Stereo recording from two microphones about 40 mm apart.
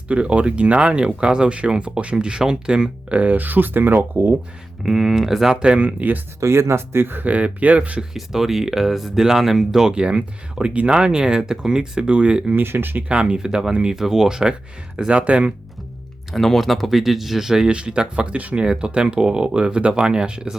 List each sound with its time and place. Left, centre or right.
0.1 s speech: right
3.1 s speech: right
4.9 s speech: centre
5.6 s speech: right
6.0 s speech: right
6.5 s speech: right
7.3 s speech: right
8.1 s speech: centre
9.9 s speech: right
12.5 s speech: right
13.1 s speech: right
16.3 s speech: centre
17.7 s speech: right
18.6 s speech: right